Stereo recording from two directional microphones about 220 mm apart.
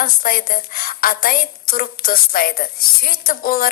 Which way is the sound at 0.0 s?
40° left (ahead or behind).